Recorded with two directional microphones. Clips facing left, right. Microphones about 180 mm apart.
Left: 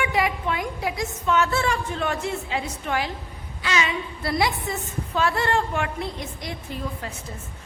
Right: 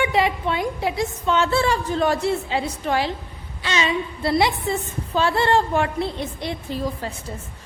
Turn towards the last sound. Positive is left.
turn(degrees=-30)  # may be behind; listen again after turning